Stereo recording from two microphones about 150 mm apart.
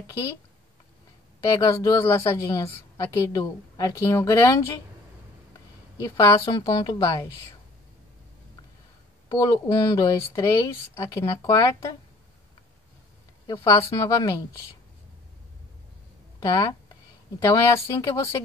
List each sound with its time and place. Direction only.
1.4 s a woman's voice: 20° left (ahead or behind)
6.0 s a woman's voice: 20° left (ahead or behind)
9.3 s a woman's voice: 25° left (ahead or behind)
13.5 s speech: 35° left (ahead or behind)
13.8 s a woman's voice: 20° left (ahead or behind)
16.3 s a woman's voice: 25° left (ahead or behind)